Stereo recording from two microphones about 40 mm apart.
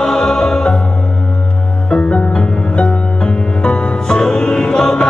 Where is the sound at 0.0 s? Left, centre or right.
Centre.